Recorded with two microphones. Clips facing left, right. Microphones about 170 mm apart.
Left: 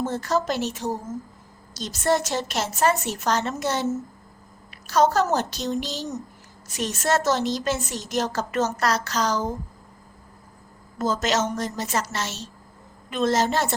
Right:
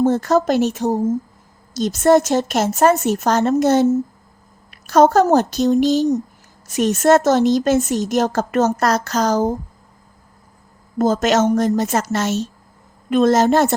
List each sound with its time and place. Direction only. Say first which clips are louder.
0.0 s a woman's voice: right 9 dB; 50° right (ahead or behind)
10.9 s a woman's voice: right 8 dB; 50° right (ahead or behind)